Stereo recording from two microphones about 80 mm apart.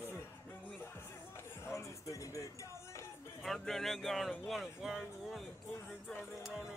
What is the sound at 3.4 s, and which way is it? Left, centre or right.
Speech, centre.